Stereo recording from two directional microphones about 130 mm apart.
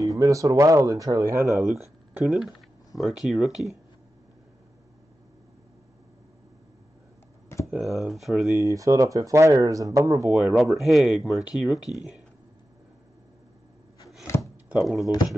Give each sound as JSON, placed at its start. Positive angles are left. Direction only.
{"t": 0.2, "sound": "speech", "side_deg": -25}
{"t": 1.6, "sound": "speech", "side_deg": 0}
{"t": 7.5, "sound": "computer keyboard", "side_deg": 20}
{"t": 7.8, "sound": "speech", "side_deg": 0}
{"t": 8.5, "sound": "speech", "side_deg": -25}
{"t": 10.3, "sound": "speech", "side_deg": -10}
{"t": 14.2, "sound": "a sound", "side_deg": 20}
{"t": 14.7, "sound": "speech", "side_deg": -5}
{"t": 15.0, "sound": "speech", "side_deg": 30}